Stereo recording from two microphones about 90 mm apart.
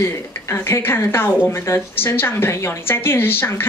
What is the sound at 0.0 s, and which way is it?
Speech, 30° left (ahead or behind).